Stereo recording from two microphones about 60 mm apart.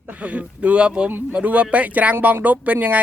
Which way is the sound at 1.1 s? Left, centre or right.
Right.